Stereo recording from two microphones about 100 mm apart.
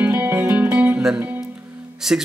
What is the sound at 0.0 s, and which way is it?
Music, 20° right (ahead or behind).